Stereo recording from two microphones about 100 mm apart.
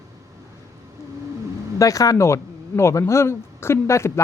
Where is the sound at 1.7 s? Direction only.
35° left (ahead or behind).